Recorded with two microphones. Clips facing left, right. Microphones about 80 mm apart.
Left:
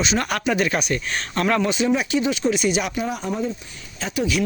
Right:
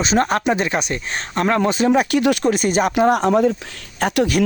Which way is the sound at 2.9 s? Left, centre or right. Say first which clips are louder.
Right 11 dB; right.